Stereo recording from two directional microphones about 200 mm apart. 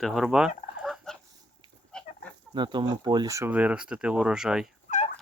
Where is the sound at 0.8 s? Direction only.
Centre (ahead or behind).